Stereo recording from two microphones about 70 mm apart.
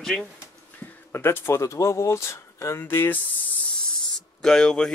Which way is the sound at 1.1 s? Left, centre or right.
Left.